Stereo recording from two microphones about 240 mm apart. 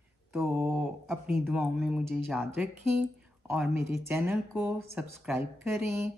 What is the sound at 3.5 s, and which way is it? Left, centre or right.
Speech, centre.